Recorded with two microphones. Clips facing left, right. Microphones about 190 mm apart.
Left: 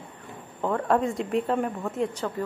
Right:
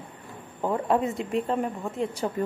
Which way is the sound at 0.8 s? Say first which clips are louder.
Left 2 dB; centre (ahead or behind).